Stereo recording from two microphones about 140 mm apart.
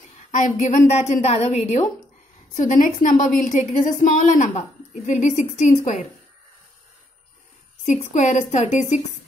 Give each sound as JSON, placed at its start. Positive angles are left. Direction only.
{"t": 0.3, "sound": "a woman's voice", "side_deg": 65}
{"t": 2.5, "sound": "a woman's voice", "side_deg": 65}
{"t": 7.8, "sound": "a woman's voice", "side_deg": 60}